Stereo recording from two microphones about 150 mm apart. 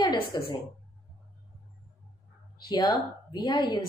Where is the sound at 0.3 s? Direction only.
30° left (ahead or behind).